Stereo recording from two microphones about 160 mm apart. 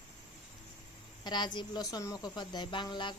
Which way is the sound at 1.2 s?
30° left (ahead or behind).